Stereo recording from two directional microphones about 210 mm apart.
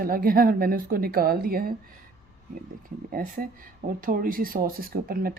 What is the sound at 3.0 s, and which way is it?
Speech, 40° right (ahead or behind).